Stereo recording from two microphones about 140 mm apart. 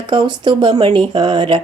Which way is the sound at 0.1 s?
35° right (ahead or behind).